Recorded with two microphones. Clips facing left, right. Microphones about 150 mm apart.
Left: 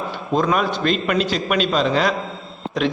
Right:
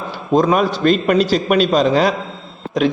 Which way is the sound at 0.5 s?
40° right (ahead or behind).